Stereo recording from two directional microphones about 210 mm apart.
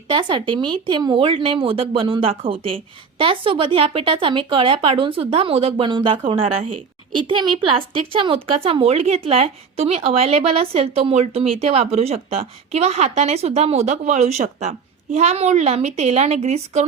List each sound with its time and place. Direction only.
0.1 s speech: 20° right (ahead or behind)